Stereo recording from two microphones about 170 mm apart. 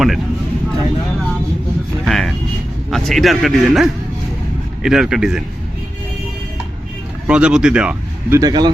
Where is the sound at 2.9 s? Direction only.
Centre (ahead or behind).